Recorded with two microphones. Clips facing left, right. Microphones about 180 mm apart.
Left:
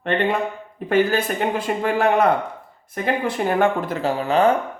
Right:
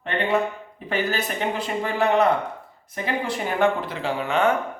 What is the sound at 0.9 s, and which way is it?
Speech, 50° left (ahead or behind).